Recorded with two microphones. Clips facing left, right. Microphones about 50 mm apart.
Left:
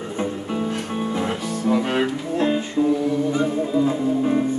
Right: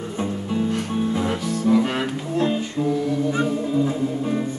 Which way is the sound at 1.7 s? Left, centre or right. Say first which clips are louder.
Even; left.